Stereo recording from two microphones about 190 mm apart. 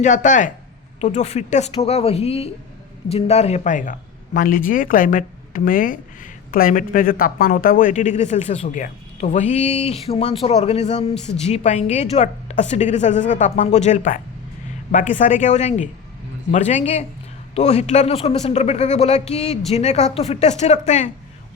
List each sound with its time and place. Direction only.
0.0 s speech: 40° left (ahead or behind)